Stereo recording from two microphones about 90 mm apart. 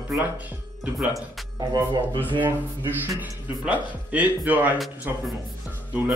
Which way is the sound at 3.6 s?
15° right (ahead or behind).